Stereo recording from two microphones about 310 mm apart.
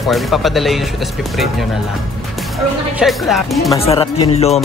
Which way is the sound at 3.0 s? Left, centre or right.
Centre.